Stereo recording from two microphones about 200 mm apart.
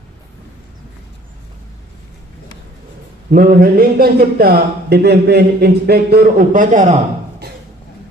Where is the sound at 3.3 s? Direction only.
45° right (ahead or behind).